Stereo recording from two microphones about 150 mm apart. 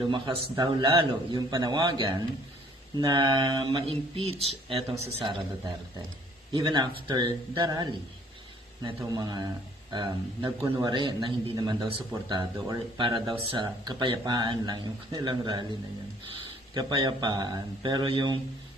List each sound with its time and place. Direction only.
0.1 s a man's voice: 30° right (ahead or behind)
6.5 s a man's voice: 30° right (ahead or behind)
16.7 s a man's voice: 25° right (ahead or behind)